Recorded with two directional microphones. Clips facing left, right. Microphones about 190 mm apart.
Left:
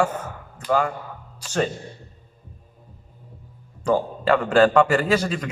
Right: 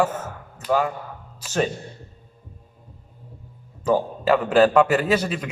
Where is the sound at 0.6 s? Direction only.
5° right (ahead or behind).